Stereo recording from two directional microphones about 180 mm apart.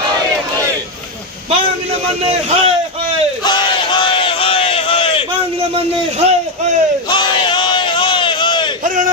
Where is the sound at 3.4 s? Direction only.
25° left (ahead or behind).